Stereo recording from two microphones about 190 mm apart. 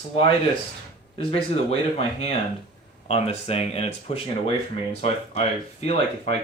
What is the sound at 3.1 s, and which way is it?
Speech, 35° left (ahead or behind).